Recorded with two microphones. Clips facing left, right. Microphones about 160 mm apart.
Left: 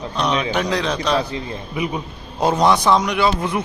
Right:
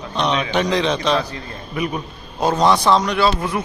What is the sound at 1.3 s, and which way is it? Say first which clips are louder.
A man's voice: left 3 dB; 20° left (ahead or behind).